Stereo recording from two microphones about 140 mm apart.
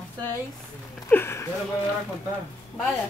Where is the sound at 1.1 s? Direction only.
15° left (ahead or behind).